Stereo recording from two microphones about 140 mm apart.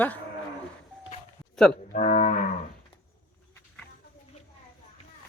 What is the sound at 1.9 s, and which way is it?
Cattle, 60° left (ahead or behind).